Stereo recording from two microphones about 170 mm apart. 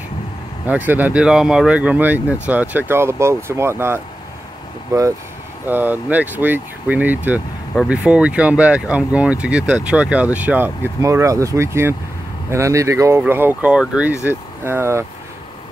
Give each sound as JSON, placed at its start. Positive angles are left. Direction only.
{"t": 0.7, "sound": "speech", "side_deg": -10}